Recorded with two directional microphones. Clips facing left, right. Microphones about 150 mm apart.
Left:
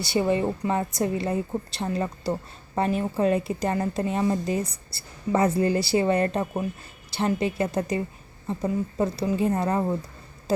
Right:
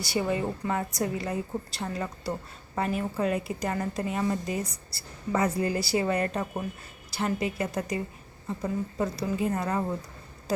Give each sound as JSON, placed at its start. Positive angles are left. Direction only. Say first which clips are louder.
{"t": 0.0, "sound": "a woman's voice", "louder": "left 5 dB", "side_deg": 25}